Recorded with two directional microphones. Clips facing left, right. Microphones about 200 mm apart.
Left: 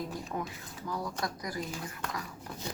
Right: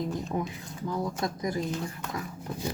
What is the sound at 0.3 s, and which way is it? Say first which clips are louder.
Speech: right 5 dB; 20° right (ahead or behind).